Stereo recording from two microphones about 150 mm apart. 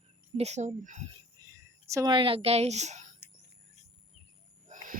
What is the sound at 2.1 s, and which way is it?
Speech, 35° right (ahead or behind).